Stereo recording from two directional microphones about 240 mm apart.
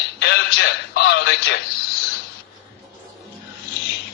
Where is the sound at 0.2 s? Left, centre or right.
Left.